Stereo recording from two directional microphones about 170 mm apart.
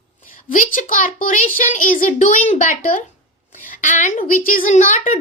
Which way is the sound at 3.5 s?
50° left (ahead or behind).